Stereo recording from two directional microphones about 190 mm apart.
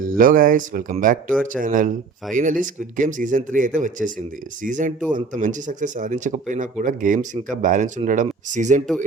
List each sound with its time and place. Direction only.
0.0 s speech: 45° right (ahead or behind)